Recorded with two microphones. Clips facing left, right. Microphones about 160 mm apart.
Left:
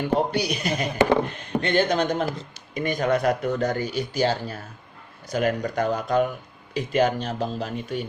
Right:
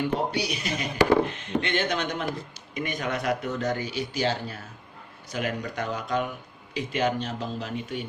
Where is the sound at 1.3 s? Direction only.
40° left (ahead or behind).